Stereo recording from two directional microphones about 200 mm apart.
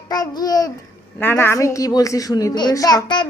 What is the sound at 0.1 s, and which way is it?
Babbling, 20° left (ahead or behind).